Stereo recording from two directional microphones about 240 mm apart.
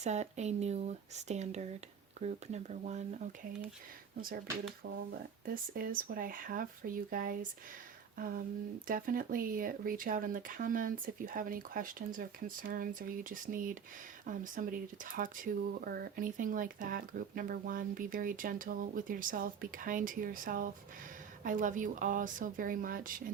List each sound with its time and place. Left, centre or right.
0.0 s speech: right
5.7 s speech: right
8.1 s a sound: right
8.9 s speech: right